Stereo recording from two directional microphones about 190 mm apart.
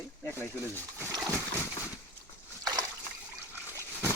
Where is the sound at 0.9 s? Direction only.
10° right (ahead or behind).